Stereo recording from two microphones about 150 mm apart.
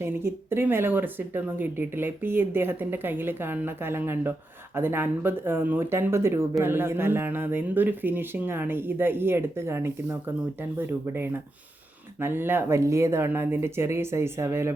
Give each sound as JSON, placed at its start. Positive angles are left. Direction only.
{"t": 0.0, "sound": "speech", "side_deg": -15}